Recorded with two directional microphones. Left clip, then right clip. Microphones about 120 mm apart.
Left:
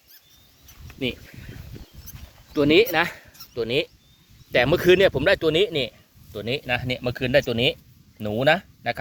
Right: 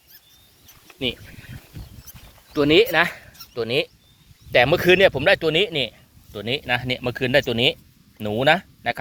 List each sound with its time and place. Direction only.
2.6 s speech: 20° left (ahead or behind)